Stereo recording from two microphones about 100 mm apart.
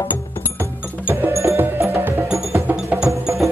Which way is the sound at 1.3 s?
30° right (ahead or behind).